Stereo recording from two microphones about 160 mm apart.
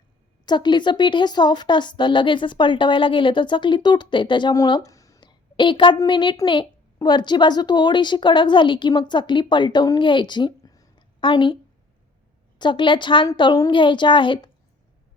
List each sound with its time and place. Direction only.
0.4 s a woman's voice: 30° left (ahead or behind)
12.5 s a woman's voice: 30° left (ahead or behind)